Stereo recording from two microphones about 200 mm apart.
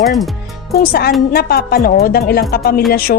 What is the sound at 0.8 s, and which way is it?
Speech, 50° left (ahead or behind).